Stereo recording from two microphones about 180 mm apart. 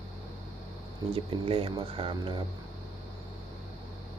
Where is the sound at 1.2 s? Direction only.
30° right (ahead or behind).